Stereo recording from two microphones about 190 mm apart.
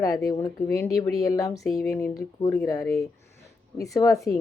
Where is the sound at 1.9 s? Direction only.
15° left (ahead or behind).